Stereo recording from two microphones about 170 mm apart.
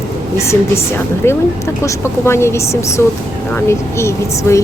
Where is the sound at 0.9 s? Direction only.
15° left (ahead or behind).